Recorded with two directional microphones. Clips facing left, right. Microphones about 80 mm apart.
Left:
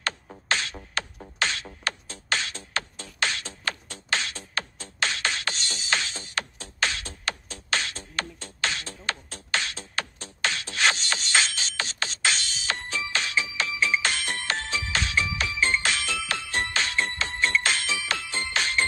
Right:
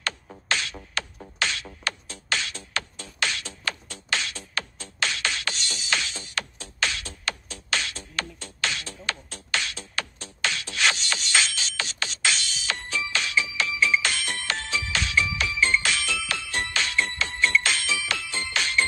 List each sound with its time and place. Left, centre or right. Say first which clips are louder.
0.5 s music: even; left